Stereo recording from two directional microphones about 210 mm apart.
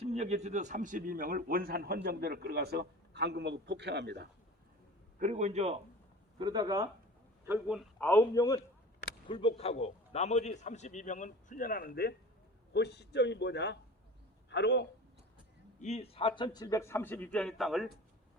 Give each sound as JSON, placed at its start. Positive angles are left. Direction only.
{"t": 0.0, "sound": "a man's voice", "side_deg": -30}
{"t": 5.2, "sound": "a man's voice", "side_deg": -35}
{"t": 6.4, "sound": "a man's voice", "side_deg": -20}
{"t": 7.9, "sound": "a man's voice", "side_deg": 10}
{"t": 15.8, "sound": "a man's voice", "side_deg": 30}